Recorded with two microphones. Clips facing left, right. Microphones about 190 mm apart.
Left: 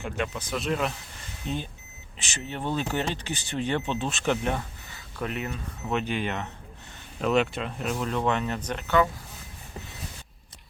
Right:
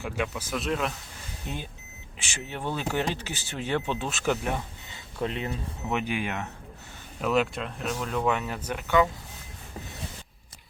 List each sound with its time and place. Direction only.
0.0 s speech: 5° right (ahead or behind)
1.5 s speech: 10° right (ahead or behind)
4.9 s speech: 25° right (ahead or behind)
5.9 s speech: 10° right (ahead or behind)